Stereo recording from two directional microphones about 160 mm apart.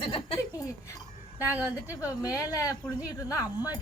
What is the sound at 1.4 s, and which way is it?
Speech, 10° right (ahead or behind).